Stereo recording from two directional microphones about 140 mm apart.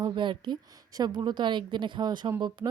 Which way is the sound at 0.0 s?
35° right (ahead or behind).